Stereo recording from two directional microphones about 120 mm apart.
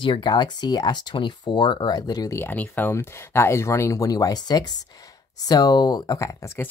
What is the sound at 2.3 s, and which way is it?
Speech, 15° left (ahead or behind).